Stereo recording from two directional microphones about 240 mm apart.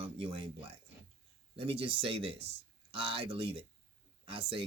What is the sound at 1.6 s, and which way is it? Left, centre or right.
Speech, right.